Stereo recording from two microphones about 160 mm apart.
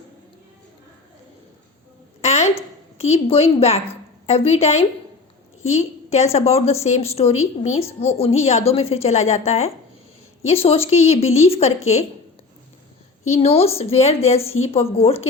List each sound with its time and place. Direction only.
2.2 s a sound: 40° left (ahead or behind)
3.0 s a woman's voice: 40° left (ahead or behind)
13.2 s a woman's voice: 40° left (ahead or behind)